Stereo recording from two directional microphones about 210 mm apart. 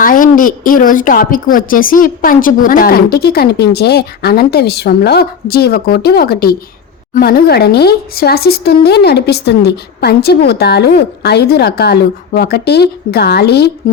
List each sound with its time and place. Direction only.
0.0 s speech: 40° left (ahead or behind)